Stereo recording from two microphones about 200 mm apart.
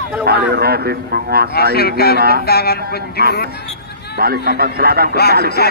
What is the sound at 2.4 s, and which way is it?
Speech, 50° left (ahead or behind).